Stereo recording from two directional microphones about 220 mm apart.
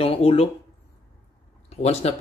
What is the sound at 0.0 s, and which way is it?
Speech, 25° left (ahead or behind).